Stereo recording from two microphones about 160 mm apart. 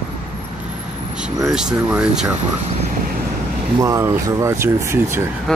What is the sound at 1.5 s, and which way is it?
Speech, 5° right (ahead or behind).